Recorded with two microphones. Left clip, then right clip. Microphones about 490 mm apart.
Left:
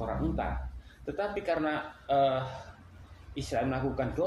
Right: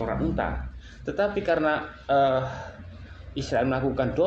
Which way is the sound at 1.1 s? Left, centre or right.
Left.